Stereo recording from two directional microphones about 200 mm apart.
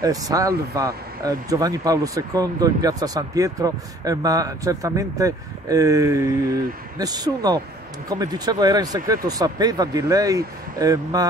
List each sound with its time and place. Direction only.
0.0 s speech: 15° right (ahead or behind)